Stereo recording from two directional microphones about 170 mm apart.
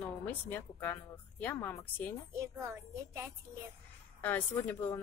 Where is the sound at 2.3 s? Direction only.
20° right (ahead or behind).